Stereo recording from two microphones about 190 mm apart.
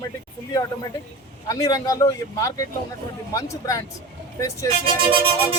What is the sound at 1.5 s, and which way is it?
Speech, 20° left (ahead or behind).